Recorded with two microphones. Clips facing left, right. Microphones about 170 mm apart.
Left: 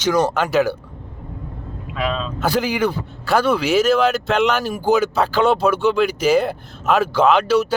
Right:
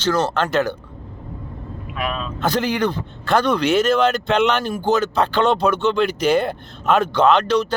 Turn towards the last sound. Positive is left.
turn(degrees=5)  # may be behind; listen again after turning